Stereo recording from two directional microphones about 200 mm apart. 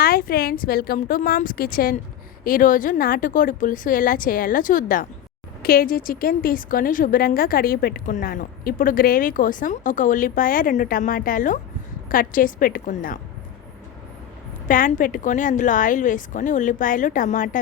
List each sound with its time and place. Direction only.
0.0 s a woman's voice: 50° left (ahead or behind)
14.7 s a woman's voice: 40° left (ahead or behind)